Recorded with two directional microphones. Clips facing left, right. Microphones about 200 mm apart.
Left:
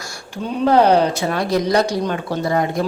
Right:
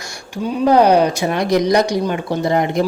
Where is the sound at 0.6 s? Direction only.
15° right (ahead or behind).